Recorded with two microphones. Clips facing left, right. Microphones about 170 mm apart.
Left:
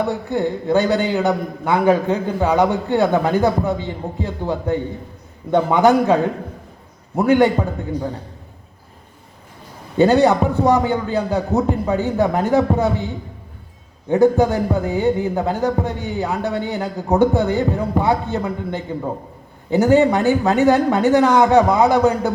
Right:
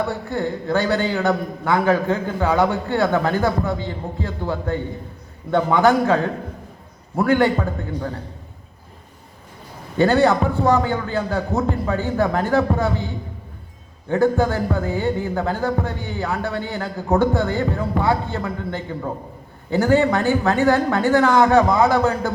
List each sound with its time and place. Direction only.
0.0 s a man's voice: 15° left (ahead or behind)
7.2 s a man's voice: 15° left (ahead or behind)
10.0 s a man's voice: 15° left (ahead or behind)
14.1 s a man's voice: 15° left (ahead or behind)